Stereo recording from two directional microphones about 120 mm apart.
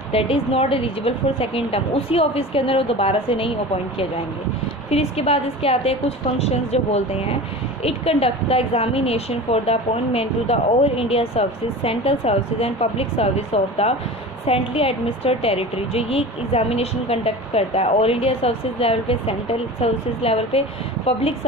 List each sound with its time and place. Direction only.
0.1 s a woman's voice: 55° left (ahead or behind)
4.8 s a woman's voice: 60° left (ahead or behind)